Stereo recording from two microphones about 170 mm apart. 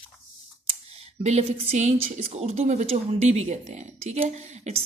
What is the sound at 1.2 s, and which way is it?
A woman's voice, 40° right (ahead or behind).